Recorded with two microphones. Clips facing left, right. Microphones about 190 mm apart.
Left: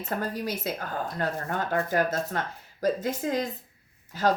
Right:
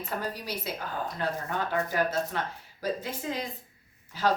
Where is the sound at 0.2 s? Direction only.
50° left (ahead or behind).